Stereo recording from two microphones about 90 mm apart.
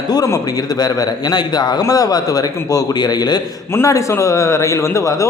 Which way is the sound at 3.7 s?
35° left (ahead or behind).